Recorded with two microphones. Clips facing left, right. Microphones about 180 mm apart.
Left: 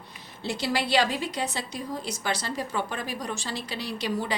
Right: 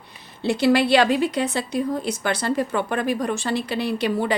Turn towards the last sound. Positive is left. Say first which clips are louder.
# right 7 dB
turn(degrees=-60)  # may be behind; listen again after turning